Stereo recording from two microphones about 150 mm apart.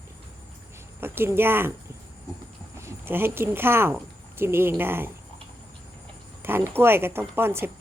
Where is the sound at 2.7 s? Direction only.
15° right (ahead or behind).